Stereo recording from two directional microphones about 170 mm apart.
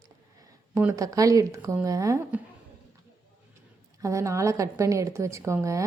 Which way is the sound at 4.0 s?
20° right (ahead or behind).